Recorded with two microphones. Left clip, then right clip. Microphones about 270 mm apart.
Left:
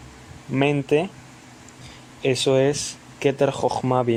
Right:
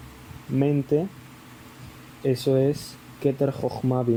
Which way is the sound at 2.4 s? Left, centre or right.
Left.